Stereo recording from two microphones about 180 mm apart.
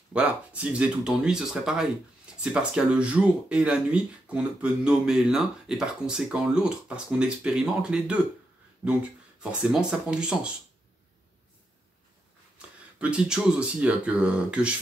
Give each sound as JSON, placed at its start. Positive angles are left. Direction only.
{"t": 0.1, "sound": "speech", "side_deg": -5}
{"t": 9.4, "sound": "speech", "side_deg": -5}
{"t": 13.0, "sound": "speech", "side_deg": -5}